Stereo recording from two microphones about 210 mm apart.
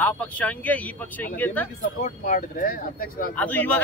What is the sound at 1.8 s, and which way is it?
Speech, 40° left (ahead or behind).